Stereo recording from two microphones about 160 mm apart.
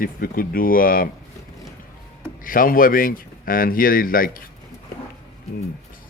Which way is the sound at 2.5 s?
60° left (ahead or behind).